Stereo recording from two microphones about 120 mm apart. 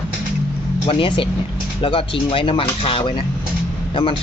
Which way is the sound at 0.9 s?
45° left (ahead or behind).